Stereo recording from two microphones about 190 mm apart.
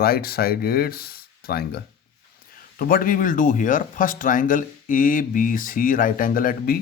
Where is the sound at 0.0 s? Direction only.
50° left (ahead or behind).